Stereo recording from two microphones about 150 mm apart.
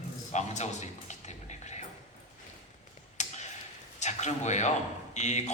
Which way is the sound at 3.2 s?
50° left (ahead or behind).